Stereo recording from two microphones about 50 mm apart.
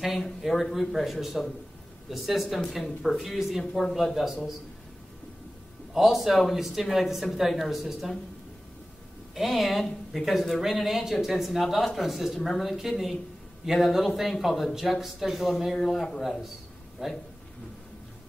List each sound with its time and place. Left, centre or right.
0.0 s speech: centre
5.9 s speech: centre
9.3 s speech: centre
17.0 s speech: centre